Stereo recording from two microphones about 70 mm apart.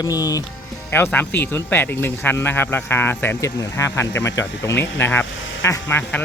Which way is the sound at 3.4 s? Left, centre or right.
Left.